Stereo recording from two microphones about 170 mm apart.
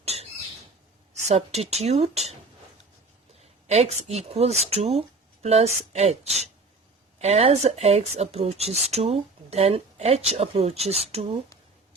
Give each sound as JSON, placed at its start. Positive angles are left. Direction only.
{"t": 0.0, "sound": "squawk", "side_deg": -40}
{"t": 1.3, "sound": "speech", "side_deg": -40}
{"t": 3.7, "sound": "speech", "side_deg": -40}